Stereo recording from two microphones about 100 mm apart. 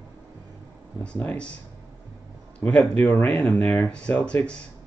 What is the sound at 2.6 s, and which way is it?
Speech, 20° left (ahead or behind).